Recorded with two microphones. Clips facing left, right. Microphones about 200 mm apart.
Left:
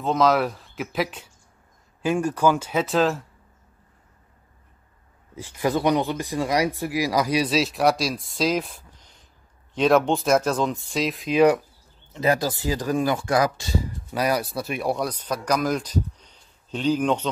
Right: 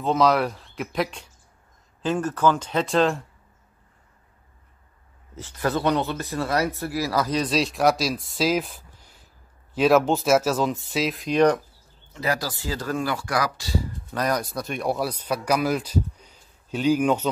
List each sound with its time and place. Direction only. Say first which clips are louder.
0.0 s speech: even; centre (ahead or behind)
5.3 s speech: left 2 dB; 10° left (ahead or behind)
12.1 s speech: left 5 dB; 20° left (ahead or behind)
14.1 s speech: left 2 dB; 10° left (ahead or behind); by 17.3 s 10° right (ahead or behind)